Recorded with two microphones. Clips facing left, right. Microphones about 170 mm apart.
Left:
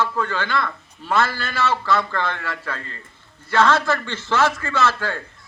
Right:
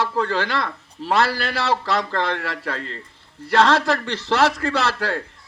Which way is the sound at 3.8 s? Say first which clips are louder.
Right 1 dB; 35° right (ahead or behind).